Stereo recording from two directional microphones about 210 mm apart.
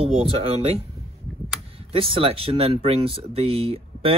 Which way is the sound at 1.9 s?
25° right (ahead or behind).